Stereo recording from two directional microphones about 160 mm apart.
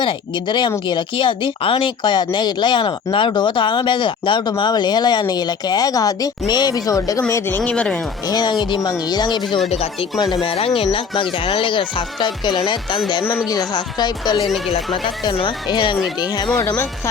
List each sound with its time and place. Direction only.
0.0 s a woman's voice: 30° left (ahead or behind); by 7.9 s 5° left (ahead or behind)
8.3 s a woman's voice: 25° left (ahead or behind)
9.6 s a woman's voice: 40° left (ahead or behind)
16.6 s speech: 10° left (ahead or behind)